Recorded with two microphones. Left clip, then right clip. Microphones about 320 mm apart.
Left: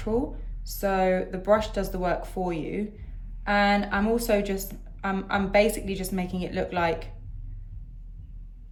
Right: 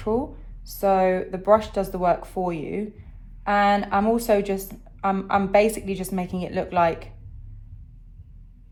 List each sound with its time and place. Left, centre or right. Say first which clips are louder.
0.1 s a woman's voice: right 2 dB; centre